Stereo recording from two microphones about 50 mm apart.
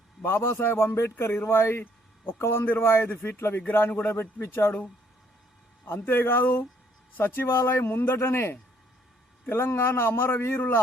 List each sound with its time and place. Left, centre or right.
0.2 s a man's voice: left
3.7 s speech: left
4.4 s speech: left
5.8 s a man's voice: left